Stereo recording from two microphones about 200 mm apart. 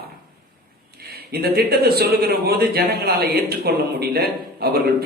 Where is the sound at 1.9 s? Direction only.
50° right (ahead or behind).